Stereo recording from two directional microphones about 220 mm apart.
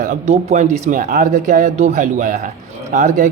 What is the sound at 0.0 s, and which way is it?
A man's voice, 35° right (ahead or behind).